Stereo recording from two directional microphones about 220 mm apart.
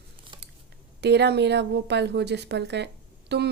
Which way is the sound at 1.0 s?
50° right (ahead or behind).